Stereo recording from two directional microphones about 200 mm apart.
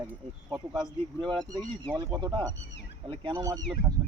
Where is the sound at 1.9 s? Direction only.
15° right (ahead or behind).